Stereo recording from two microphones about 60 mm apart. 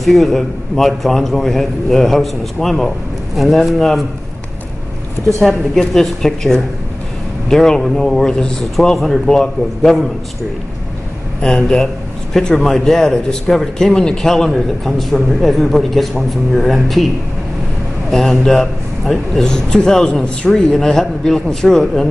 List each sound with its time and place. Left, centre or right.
0.0 s a man's voice: centre
5.4 s speech: centre
12.4 s a man's voice: centre
18.1 s speech: centre